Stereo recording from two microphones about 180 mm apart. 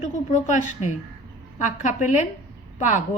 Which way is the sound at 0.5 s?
45° left (ahead or behind).